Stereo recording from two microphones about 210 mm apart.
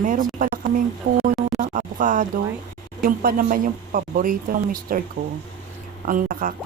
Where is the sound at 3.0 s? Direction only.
40° right (ahead or behind).